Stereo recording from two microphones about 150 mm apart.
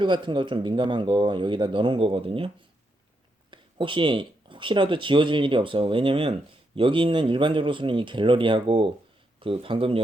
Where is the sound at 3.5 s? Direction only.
35° right (ahead or behind).